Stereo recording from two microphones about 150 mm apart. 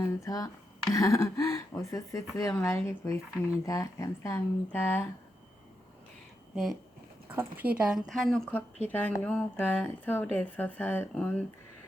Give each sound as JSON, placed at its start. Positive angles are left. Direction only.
{"t": 0.0, "sound": "speech", "side_deg": 25}
{"t": 7.3, "sound": "a woman's voice", "side_deg": -15}